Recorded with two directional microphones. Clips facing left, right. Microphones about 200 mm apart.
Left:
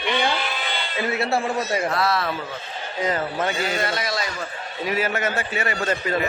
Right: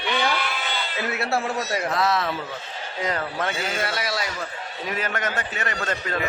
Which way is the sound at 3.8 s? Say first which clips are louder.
Left 2 dB; 10° right (ahead or behind).